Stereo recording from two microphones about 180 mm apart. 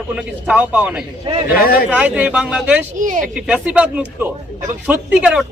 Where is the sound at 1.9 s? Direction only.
10° right (ahead or behind).